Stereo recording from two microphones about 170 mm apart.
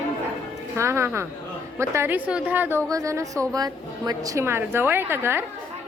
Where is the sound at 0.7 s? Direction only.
15° right (ahead or behind).